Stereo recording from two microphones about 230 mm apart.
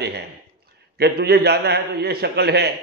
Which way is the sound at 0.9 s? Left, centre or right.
Right.